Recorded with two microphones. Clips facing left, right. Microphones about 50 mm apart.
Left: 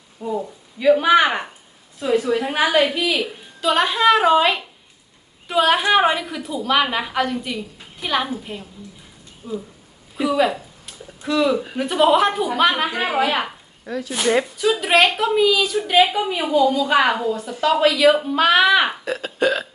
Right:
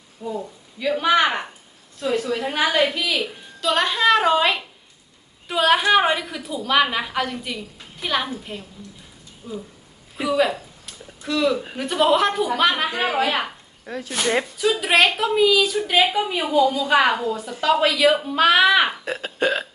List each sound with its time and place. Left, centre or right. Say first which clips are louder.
0.2 s a woman's voice: left 4 dB; centre
10.2 s a woman's voice: left 1 dB; centre
19.0 s burping: left 2 dB; right